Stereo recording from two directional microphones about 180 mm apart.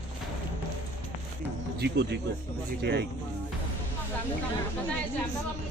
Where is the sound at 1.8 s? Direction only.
65° right (ahead or behind).